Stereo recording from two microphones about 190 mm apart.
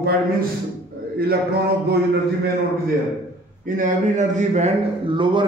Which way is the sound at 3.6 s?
45° right (ahead or behind).